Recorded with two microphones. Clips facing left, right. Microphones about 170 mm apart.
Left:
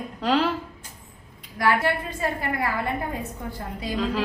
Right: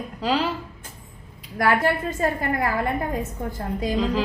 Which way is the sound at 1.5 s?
50° right (ahead or behind).